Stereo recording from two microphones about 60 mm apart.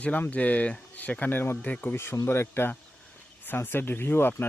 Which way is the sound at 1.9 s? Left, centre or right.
Left.